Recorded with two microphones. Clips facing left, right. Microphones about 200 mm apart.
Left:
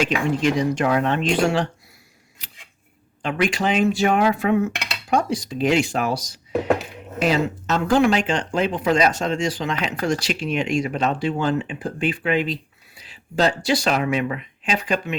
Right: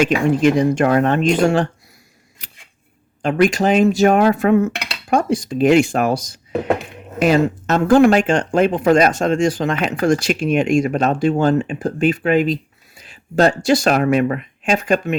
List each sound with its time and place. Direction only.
0.0 s dishes: 50° right (ahead or behind)
3.2 s dishes: 45° right (ahead or behind)
13.0 s speech: 50° right (ahead or behind)